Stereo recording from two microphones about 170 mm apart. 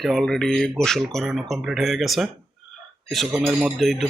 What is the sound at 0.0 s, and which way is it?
Speech, centre (ahead or behind).